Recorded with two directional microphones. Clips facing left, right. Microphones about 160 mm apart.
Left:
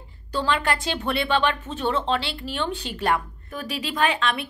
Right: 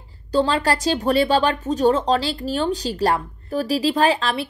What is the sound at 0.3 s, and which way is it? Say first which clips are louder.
Speech: right 5 dB; 30° right (ahead or behind).